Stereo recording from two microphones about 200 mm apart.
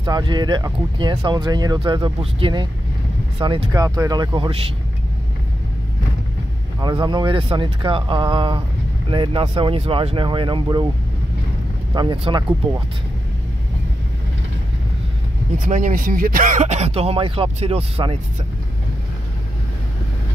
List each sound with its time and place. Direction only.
0.0 s speech: 20° right (ahead or behind)
6.8 s speech: 20° right (ahead or behind)
11.9 s speech: 20° right (ahead or behind)
15.6 s speech: 40° right (ahead or behind)